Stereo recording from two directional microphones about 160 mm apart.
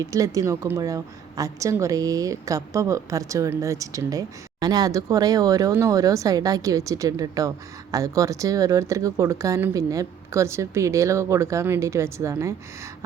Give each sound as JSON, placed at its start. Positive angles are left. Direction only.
{"t": 0.0, "sound": "a woman's voice", "side_deg": -20}